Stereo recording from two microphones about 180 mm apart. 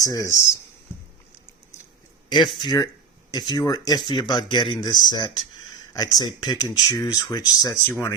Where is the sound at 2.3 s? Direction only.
25° left (ahead or behind).